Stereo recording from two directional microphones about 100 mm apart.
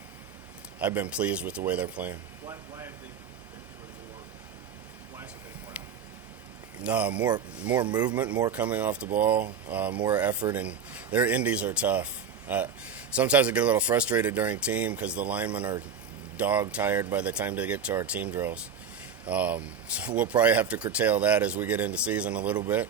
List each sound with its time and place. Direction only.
0.8 s speech: 15° right (ahead or behind)
2.5 s speech: 30° right (ahead or behind)
6.8 s speech: 15° right (ahead or behind)
7.8 s speech: 45° right (ahead or behind)
8.1 s speech: 15° right (ahead or behind)